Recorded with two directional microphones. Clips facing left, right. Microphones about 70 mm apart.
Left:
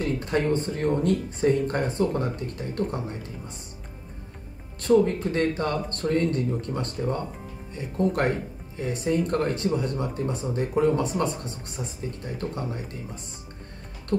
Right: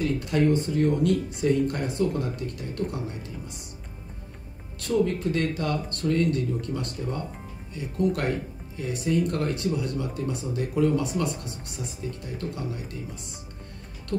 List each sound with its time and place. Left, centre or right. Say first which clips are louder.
0.2 s speech: right 1 dB; left
4.7 s speech: left 4 dB; left